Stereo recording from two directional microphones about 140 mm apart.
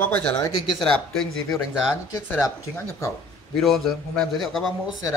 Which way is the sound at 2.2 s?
15° left (ahead or behind).